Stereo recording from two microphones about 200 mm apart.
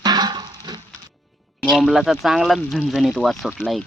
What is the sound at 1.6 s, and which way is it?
Speech, centre (ahead or behind).